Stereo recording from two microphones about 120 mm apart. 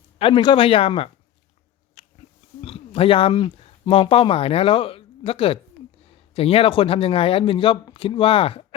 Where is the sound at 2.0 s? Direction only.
60° left (ahead or behind).